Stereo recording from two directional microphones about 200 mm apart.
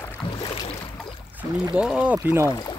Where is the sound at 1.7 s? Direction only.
5° right (ahead or behind).